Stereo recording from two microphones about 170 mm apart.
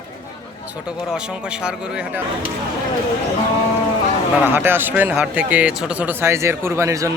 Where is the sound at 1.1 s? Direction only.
5° right (ahead or behind).